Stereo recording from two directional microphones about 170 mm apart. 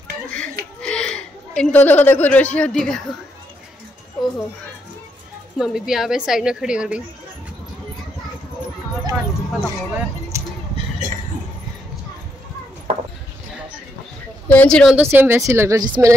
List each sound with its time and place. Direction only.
0.8 s a woman's voice: 5° left (ahead or behind)
5.6 s a woman's voice: centre (ahead or behind)
10.3 s a sound: 15° right (ahead or behind)
12.9 s a sound: 35° right (ahead or behind)
14.5 s a woman's voice: 5° left (ahead or behind)
15.0 s speech: 10° right (ahead or behind)